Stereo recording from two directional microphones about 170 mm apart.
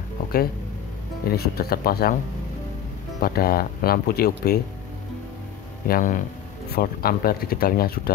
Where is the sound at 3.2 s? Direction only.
65° left (ahead or behind).